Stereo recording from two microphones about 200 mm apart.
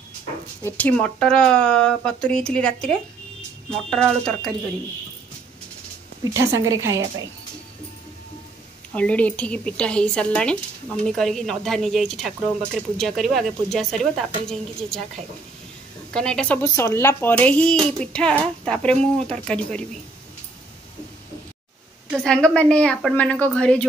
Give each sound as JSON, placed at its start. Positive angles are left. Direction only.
{"t": 0.7, "sound": "speech", "side_deg": 5}
{"t": 6.3, "sound": "a woman's voice", "side_deg": -15}
{"t": 8.9, "sound": "speech", "side_deg": 5}
{"t": 16.1, "sound": "speech", "side_deg": 5}
{"t": 22.1, "sound": "speech", "side_deg": 0}